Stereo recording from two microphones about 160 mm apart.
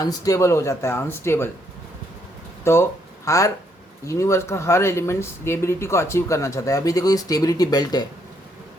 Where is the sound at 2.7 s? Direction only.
15° left (ahead or behind).